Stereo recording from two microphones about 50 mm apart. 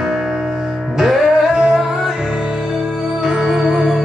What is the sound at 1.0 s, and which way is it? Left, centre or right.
Music, centre.